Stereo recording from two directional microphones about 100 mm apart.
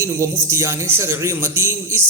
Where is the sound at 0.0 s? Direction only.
30° right (ahead or behind).